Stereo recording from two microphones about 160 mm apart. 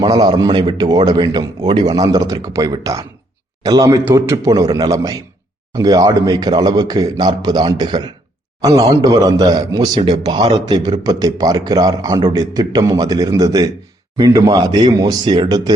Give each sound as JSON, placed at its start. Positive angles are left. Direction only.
{"t": 0.0, "sound": "a man's voice", "side_deg": -25}